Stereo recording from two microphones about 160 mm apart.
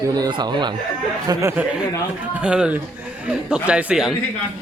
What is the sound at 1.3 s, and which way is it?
Speech, 15° right (ahead or behind).